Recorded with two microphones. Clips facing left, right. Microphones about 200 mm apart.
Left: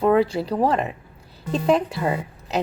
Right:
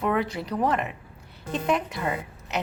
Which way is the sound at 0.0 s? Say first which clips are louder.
Left 8 dB; 30° left (ahead or behind).